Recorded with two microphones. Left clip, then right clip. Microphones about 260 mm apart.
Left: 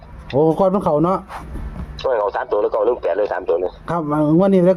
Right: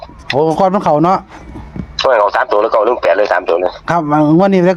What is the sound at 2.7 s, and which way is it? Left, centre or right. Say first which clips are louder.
Speech: right 7 dB; right.